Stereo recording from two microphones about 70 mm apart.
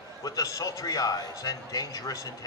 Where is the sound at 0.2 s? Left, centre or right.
Left.